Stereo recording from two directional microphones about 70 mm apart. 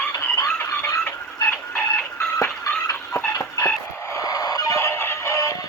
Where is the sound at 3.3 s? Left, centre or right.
Left.